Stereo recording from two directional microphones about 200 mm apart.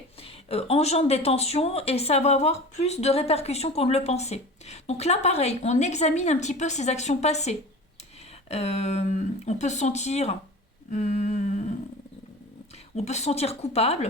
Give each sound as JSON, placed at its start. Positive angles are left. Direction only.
{"t": 0.2, "sound": "a woman's voice", "side_deg": 30}
{"t": 13.0, "sound": "a woman's voice", "side_deg": 35}